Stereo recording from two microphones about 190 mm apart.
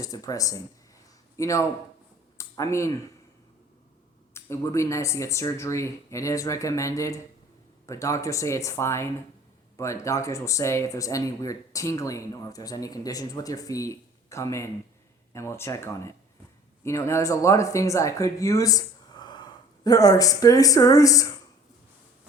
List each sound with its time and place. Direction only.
0.0 s speech: 20° left (ahead or behind)
4.4 s speech: 15° left (ahead or behind)